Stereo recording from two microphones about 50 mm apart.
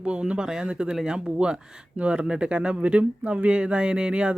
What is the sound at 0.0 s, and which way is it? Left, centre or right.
Speech, right.